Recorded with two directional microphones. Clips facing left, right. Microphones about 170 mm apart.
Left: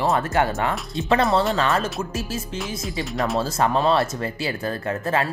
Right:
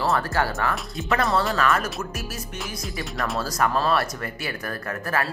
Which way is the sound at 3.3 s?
25° left (ahead or behind).